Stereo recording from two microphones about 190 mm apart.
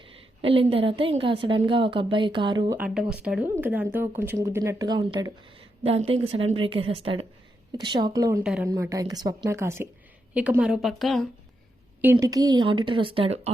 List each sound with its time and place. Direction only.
0.4 s speech: 30° right (ahead or behind)
2.7 s a woman's voice: 5° right (ahead or behind)
12.2 s speech: 20° right (ahead or behind)